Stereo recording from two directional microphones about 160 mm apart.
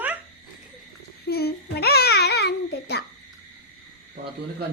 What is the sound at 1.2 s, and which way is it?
Babbling, 85° left.